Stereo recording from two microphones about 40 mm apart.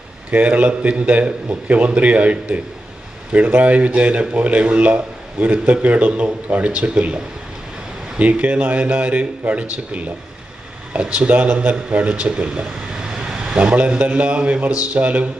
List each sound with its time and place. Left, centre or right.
0.3 s a man's voice: right
8.2 s a man's voice: right
13.1 s vehicle: centre
13.6 s a man's voice: right